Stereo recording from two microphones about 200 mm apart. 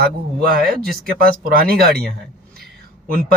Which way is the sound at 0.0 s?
50° right (ahead or behind).